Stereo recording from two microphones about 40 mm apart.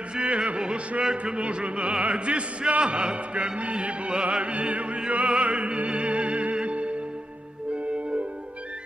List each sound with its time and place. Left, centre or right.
0.1 s music: right
1.1 s speech: right